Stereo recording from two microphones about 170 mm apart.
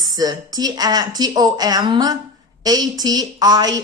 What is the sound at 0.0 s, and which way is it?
Speech, 20° right (ahead or behind).